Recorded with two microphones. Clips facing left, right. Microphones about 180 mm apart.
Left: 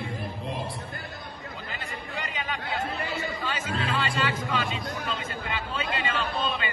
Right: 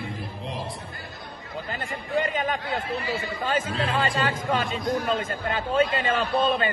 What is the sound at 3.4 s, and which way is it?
Speech, 50° right (ahead or behind).